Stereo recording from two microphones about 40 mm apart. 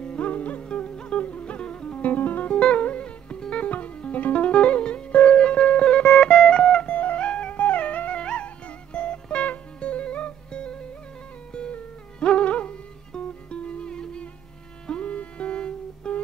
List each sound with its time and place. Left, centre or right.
0.0 s music: left
2.0 s music: left
2.5 s music: left
14.9 s music: left